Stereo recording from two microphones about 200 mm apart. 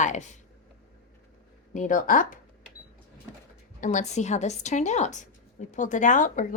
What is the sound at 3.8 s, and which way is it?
A woman's voice, 40° left (ahead or behind).